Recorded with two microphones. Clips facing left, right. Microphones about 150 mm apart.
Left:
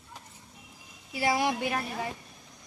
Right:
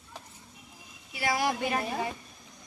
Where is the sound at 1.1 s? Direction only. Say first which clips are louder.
Left 2 dB; 25° left (ahead or behind).